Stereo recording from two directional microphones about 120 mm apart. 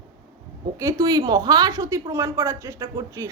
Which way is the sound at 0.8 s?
30° right (ahead or behind).